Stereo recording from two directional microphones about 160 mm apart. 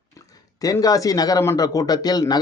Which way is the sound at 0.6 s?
20° left (ahead or behind).